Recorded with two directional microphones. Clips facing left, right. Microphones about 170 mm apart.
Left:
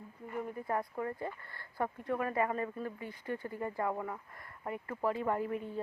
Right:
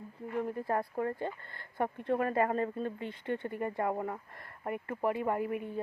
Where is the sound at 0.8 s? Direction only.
30° right (ahead or behind).